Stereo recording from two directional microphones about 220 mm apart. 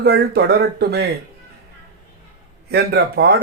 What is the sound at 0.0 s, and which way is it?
A man's voice, 50° right (ahead or behind).